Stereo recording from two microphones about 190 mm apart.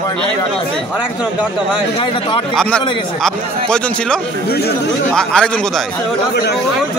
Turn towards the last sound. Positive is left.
turn(degrees=5)  # may be behind; listen again after turning